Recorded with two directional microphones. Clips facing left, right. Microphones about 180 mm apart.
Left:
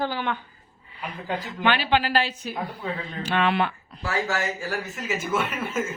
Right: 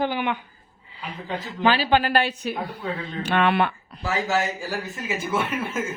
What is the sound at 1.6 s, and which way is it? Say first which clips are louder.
Speech: right 3 dB; 35° right (ahead or behind).